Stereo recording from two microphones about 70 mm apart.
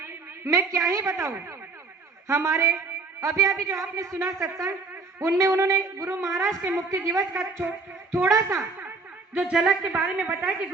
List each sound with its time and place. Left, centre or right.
0.0 s a woman's voice: right
9.3 s a woman's voice: centre